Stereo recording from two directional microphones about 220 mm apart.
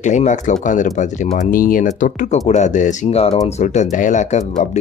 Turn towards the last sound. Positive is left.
turn(degrees=30)  # may be behind; listen again after turning